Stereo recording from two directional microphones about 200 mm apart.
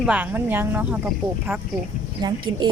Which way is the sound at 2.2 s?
20° right (ahead or behind).